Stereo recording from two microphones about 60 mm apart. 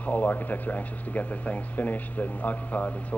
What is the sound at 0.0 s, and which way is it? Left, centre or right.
A man's voice, left.